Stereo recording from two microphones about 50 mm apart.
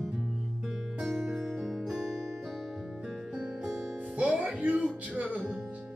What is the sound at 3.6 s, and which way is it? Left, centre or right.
Music, centre.